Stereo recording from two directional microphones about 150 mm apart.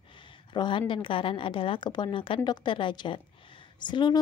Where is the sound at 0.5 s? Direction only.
30° left (ahead or behind).